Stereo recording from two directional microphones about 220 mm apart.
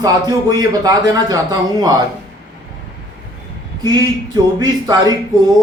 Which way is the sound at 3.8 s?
15° right (ahead or behind).